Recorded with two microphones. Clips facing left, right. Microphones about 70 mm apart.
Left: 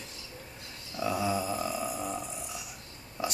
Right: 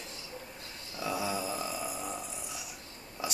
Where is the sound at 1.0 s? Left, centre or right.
Centre.